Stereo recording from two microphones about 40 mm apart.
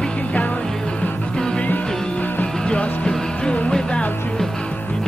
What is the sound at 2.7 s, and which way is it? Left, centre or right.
Music, left.